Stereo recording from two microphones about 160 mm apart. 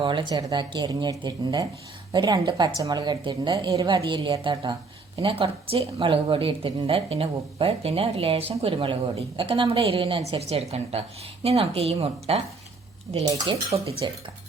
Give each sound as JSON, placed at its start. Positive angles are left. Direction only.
{"t": 0.0, "sound": "a woman's voice", "side_deg": -30}
{"t": 13.2, "sound": "a woman's voice", "side_deg": -25}